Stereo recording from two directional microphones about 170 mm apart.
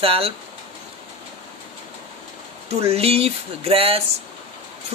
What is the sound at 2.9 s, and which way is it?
A woman's voice, 35° right (ahead or behind).